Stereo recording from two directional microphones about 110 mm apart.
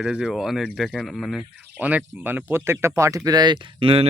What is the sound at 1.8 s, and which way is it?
Speech, 15° right (ahead or behind).